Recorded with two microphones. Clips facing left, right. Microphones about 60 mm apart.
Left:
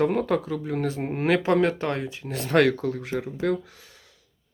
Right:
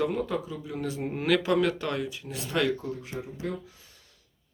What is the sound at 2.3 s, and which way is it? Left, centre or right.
Speech, left.